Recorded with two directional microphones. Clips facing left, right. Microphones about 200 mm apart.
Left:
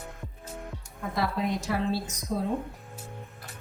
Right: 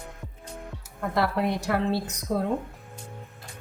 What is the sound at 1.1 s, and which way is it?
A woman's voice, 65° right (ahead or behind).